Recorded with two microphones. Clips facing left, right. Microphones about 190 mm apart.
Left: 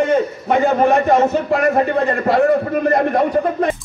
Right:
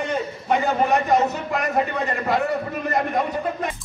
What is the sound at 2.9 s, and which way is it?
Speech, 50° left (ahead or behind).